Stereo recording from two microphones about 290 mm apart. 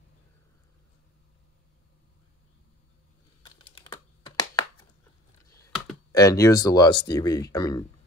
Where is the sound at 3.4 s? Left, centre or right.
Centre.